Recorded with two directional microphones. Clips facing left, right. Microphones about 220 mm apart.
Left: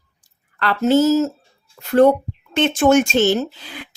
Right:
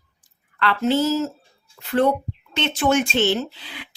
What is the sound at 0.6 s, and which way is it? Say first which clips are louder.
Speech: left 5 dB; 40° left (ahead or behind).